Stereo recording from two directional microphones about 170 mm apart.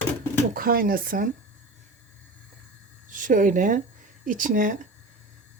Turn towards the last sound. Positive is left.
turn(degrees=-50)  # may be behind; listen again after turning